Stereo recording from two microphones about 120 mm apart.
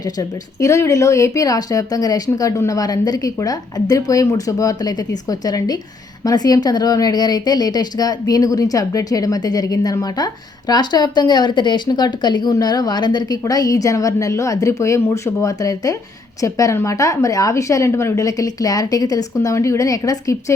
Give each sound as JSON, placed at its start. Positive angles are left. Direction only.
{"t": 0.0, "sound": "speech", "side_deg": 25}